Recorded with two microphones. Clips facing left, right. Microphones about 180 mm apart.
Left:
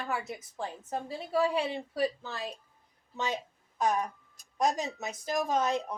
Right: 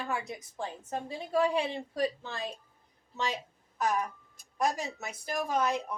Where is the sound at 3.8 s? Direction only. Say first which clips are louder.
Left 1 dB; 25° left (ahead or behind).